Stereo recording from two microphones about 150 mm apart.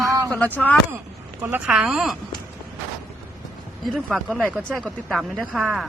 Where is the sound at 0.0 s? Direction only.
25° right (ahead or behind).